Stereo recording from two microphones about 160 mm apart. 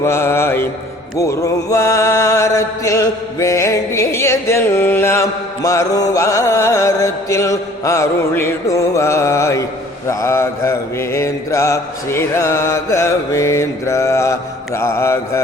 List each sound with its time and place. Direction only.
0.0 s mantra: 15° left (ahead or behind)